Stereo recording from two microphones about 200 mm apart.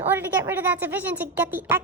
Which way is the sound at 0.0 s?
10° right (ahead or behind).